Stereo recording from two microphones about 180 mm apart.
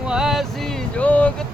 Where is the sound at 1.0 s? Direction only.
10° left (ahead or behind).